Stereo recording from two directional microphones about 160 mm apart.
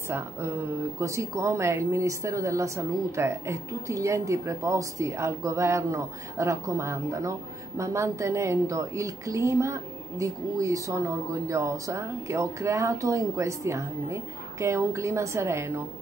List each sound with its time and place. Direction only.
0.1 s speech: 15° right (ahead or behind)